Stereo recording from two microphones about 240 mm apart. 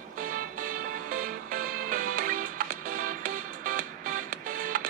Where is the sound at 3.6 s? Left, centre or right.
Right.